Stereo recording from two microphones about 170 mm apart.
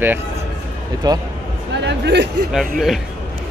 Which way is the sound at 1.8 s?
90° right.